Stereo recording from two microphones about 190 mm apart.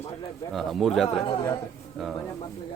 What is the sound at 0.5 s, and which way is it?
Speech, centre (ahead or behind).